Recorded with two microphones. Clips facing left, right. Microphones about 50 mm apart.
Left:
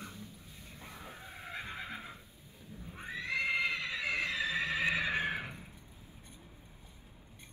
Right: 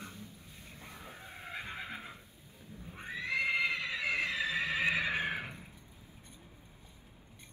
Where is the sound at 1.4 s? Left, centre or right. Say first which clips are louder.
Even; centre.